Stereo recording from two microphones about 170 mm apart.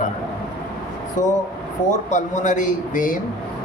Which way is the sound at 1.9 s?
45° left (ahead or behind).